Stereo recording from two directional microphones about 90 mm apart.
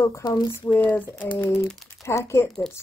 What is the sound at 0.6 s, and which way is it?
Speech, 20° left (ahead or behind).